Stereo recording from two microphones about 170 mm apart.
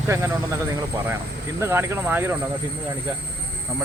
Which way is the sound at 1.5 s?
15° right (ahead or behind).